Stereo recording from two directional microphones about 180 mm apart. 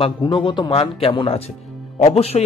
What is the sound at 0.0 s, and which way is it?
A man's voice, 30° left (ahead or behind).